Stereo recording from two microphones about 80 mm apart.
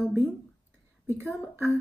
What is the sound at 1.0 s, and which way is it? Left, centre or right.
Speech, right.